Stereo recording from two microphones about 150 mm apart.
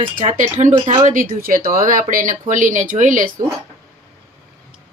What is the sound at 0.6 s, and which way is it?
Speech, 40° right (ahead or behind).